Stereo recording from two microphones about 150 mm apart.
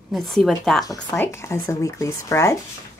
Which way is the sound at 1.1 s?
15° left (ahead or behind).